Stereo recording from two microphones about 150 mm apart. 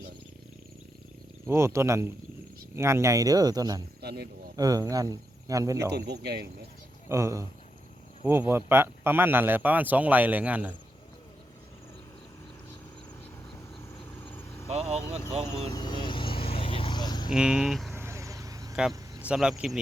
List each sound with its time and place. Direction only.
1.5 s a man's voice: 15° right (ahead or behind)
4.0 s a sound: 90° right
4.5 s speech: 25° right (ahead or behind)
5.9 s speech: 90° right
7.1 s a man's voice: 20° right (ahead or behind)
14.3 s vehicle: 15° left (ahead or behind)
15.7 s vehicle: 30° left (ahead or behind)
17.2 s speech: 5° right (ahead or behind)
17.9 s vehicle: 15° right (ahead or behind)
19.2 s speech: 5° right (ahead or behind)